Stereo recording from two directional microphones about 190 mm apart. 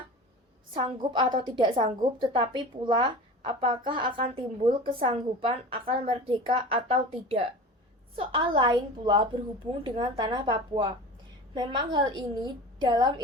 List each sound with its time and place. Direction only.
0.7 s a woman's voice: 25° right (ahead or behind)